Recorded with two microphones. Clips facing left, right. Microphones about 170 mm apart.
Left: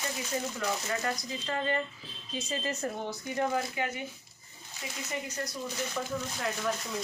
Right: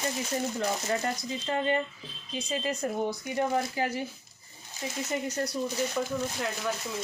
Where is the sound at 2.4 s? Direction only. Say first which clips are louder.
Right 3 dB; 15° right (ahead or behind).